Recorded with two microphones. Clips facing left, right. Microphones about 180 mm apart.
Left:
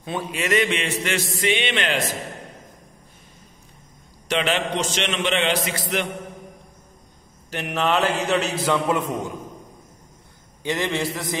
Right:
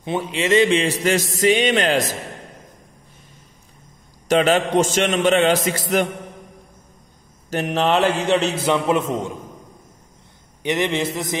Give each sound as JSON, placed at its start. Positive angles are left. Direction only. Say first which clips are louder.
{"t": 0.0, "sound": "a man's voice", "louder": "right 4 dB", "side_deg": -25}
{"t": 4.3, "sound": "a man's voice", "louder": "right 7 dB", "side_deg": -40}
{"t": 7.4, "sound": "a man's voice", "louder": "right 4 dB", "side_deg": -40}
{"t": 10.6, "sound": "a man's voice", "louder": "right 3 dB", "side_deg": -20}